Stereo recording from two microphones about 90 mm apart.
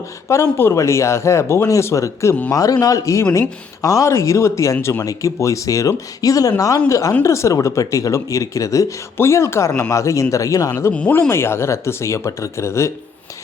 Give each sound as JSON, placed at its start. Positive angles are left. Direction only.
{"t": 0.3, "sound": "speech", "side_deg": 30}